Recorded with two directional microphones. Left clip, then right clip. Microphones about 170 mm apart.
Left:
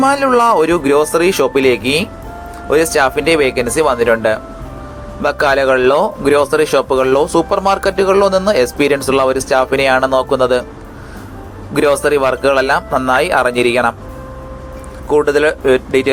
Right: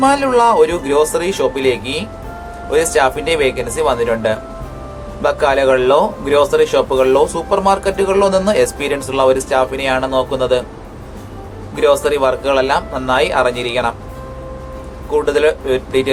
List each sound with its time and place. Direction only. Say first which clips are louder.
0.0 s a man's voice: left 1 dB; 30° left (ahead or behind)
11.7 s a man's voice: left 1 dB; 35° left (ahead or behind)
15.1 s a man's voice: left 2 dB; 35° left (ahead or behind)